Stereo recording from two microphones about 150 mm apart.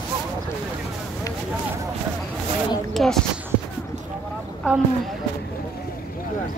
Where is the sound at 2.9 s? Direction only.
Centre (ahead or behind).